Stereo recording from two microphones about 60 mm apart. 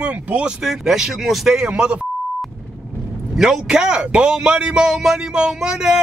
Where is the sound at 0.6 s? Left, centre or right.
Centre.